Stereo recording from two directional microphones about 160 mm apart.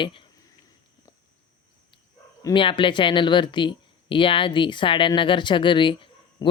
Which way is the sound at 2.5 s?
30° left (ahead or behind).